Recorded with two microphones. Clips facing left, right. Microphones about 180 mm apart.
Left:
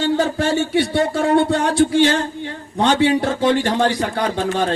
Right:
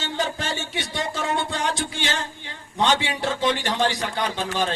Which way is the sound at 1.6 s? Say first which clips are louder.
Left 12 dB; 50° left (ahead or behind).